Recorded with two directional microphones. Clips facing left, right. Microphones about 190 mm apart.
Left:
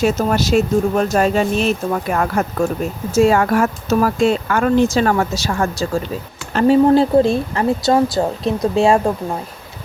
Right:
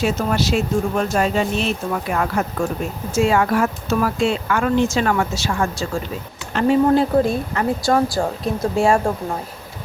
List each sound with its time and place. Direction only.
0.0 s speech: 45° left (ahead or behind); by 9.1 s 25° left (ahead or behind)